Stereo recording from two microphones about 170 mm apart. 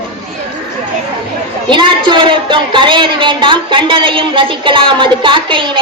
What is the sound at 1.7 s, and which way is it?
A woman's voice, 30° right (ahead or behind).